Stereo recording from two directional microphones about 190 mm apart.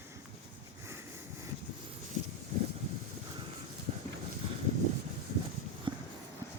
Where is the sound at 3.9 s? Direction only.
30° right (ahead or behind).